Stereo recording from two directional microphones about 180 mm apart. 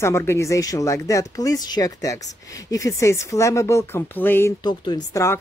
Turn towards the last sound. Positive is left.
turn(degrees=15)  # may be behind; listen again after turning